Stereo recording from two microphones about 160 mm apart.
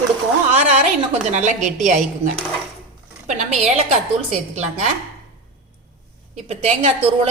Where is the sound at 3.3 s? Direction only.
50° right (ahead or behind).